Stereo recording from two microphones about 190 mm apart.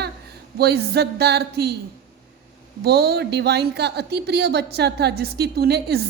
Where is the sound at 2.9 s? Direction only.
55° right (ahead or behind).